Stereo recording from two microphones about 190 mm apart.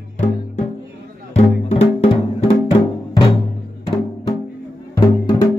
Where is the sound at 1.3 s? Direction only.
35° left (ahead or behind).